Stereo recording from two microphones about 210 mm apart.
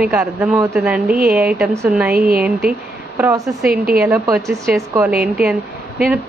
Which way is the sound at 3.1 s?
10° right (ahead or behind).